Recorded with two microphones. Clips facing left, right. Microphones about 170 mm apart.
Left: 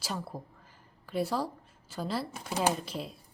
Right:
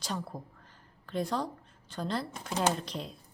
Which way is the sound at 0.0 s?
5° left (ahead or behind).